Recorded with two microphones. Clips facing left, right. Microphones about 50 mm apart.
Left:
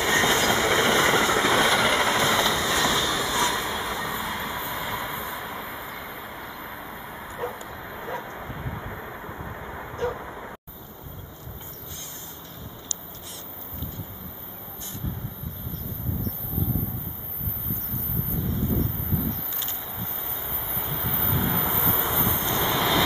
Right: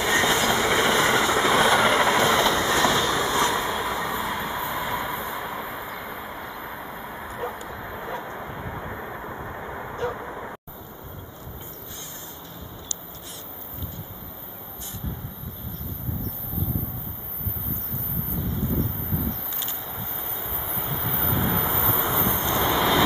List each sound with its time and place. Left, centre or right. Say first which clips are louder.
0.0 s train: even; centre
0.7 s vehicle: even; centre
2.4 s vehicle: right 3 dB; right
2.9 s boat: right 3 dB; right
3.4 s vehicle: right 2 dB; centre
7.3 s vehicle: even; centre
7.6 s vehicle: right 2 dB; centre
20.4 s vehicle: right 2 dB; centre